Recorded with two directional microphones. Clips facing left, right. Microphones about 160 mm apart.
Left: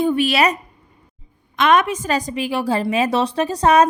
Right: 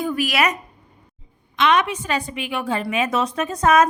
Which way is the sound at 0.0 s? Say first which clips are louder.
Left 4 dB; 30° left (ahead or behind).